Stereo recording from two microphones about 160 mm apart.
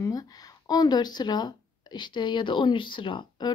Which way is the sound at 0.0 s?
25° left (ahead or behind).